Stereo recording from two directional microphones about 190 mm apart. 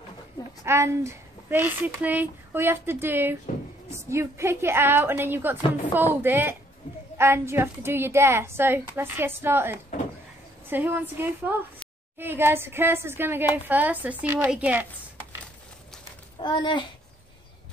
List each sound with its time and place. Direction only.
0.7 s speech: 15° right (ahead or behind)
16.3 s a child's voice: 25° left (ahead or behind)